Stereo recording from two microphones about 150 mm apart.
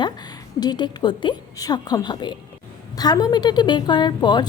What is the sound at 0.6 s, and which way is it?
A woman's voice, 30° left (ahead or behind).